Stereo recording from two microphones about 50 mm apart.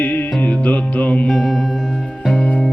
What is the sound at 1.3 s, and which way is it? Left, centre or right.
Music, centre.